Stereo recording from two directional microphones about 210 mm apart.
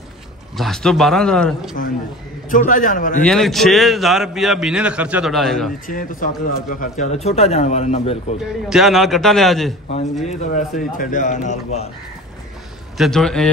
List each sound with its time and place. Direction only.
0.6 s a man's voice: centre (ahead or behind)
2.5 s speech: 40° left (ahead or behind)
3.3 s a man's voice: centre (ahead or behind)
5.9 s speech: 40° left (ahead or behind)
8.6 s a man's voice: centre (ahead or behind)
10.2 s speech: 40° left (ahead or behind)
12.9 s a man's voice: centre (ahead or behind)